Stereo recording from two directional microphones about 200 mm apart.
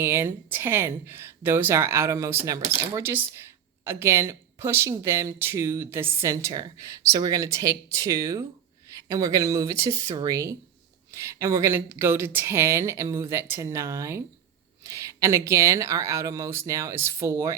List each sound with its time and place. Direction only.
0.0 s speech: 10° right (ahead or behind)